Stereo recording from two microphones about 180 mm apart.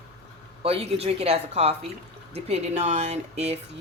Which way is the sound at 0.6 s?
35° right (ahead or behind).